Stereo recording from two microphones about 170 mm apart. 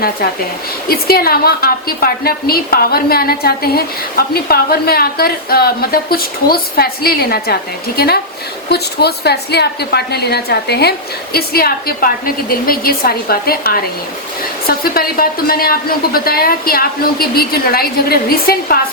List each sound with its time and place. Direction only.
0.9 s a woman's voice: 65° left (ahead or behind)